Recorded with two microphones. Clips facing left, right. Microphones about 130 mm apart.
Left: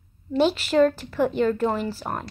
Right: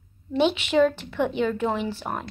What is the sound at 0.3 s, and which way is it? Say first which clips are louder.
A woman's voice: left 1 dB; 5° left (ahead or behind).